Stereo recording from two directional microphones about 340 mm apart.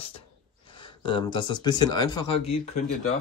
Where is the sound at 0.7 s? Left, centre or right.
Centre.